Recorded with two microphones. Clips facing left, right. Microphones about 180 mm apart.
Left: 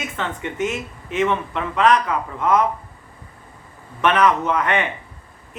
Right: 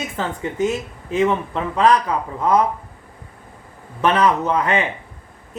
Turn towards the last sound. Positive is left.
turn(degrees=-30)  # may be behind; listen again after turning